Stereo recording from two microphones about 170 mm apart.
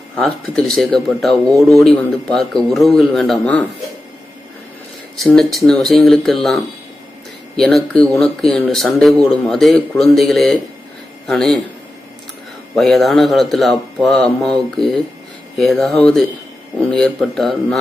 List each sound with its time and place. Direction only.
0.2 s speech: 5° left (ahead or behind)
1.5 s a man's voice: 20° right (ahead or behind)
1.8 s speech: 5° left (ahead or behind)
5.1 s speech: centre (ahead or behind)
7.5 s speech: centre (ahead or behind)
12.7 s speech: centre (ahead or behind)